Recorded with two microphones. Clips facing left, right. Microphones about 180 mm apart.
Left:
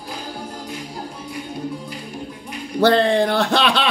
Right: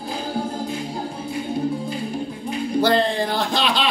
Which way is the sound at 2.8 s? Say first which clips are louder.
Left 5 dB; 70° left (ahead or behind).